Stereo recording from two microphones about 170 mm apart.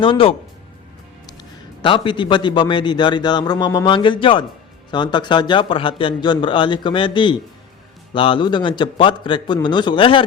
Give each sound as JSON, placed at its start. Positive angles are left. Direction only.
{"t": 0.0, "sound": "speech", "side_deg": 30}
{"t": 1.8, "sound": "a man's voice", "side_deg": 30}